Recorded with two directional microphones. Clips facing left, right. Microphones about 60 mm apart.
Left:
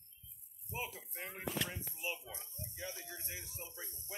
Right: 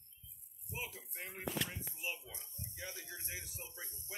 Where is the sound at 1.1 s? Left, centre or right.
Centre.